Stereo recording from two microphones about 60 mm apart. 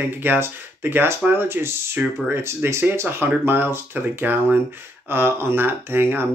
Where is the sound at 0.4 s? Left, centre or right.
Right.